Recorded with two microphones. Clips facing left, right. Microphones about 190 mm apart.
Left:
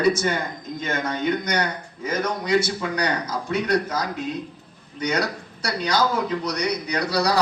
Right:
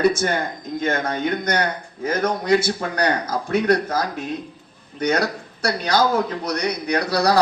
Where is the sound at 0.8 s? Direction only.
55° right (ahead or behind).